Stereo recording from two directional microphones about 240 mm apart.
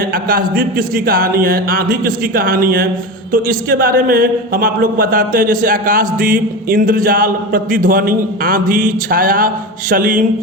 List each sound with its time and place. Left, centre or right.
0.1 s a man's voice: right